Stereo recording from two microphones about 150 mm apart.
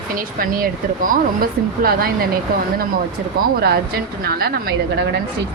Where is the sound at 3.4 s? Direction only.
90° right.